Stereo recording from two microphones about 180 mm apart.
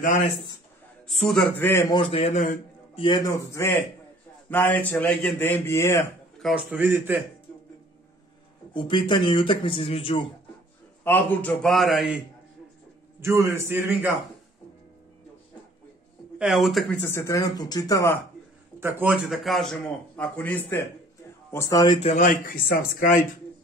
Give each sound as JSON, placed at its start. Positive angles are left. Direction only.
{"t": 1.0, "sound": "a man's voice", "side_deg": 0}
{"t": 3.0, "sound": "a man's voice", "side_deg": 20}
{"t": 6.4, "sound": "a man's voice", "side_deg": -10}
{"t": 8.7, "sound": "a man's voice", "side_deg": 25}
{"t": 11.1, "sound": "a man's voice", "side_deg": 10}
{"t": 13.2, "sound": "a man's voice", "side_deg": -15}
{"t": 16.3, "sound": "a man's voice", "side_deg": 0}
{"t": 17.0, "sound": "a man's voice", "side_deg": 15}
{"t": 18.8, "sound": "a man's voice", "side_deg": -10}
{"t": 22.1, "sound": "speech", "side_deg": 45}